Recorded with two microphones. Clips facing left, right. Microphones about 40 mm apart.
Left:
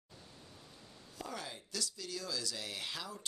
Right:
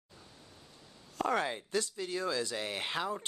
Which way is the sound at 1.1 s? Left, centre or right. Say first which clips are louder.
Right 13 dB; right.